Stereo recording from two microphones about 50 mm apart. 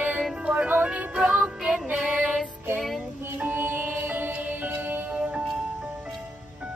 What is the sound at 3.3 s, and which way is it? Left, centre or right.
Music, right.